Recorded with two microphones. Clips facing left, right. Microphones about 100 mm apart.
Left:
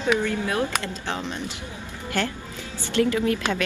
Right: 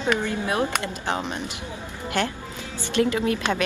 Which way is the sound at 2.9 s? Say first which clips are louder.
Even; 25° right (ahead or behind).